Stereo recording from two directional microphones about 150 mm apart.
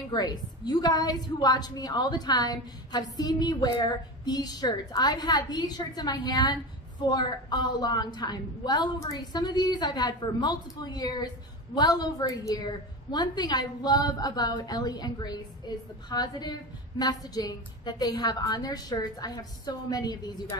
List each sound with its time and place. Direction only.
0.1 s a woman's voice: 25° left (ahead or behind)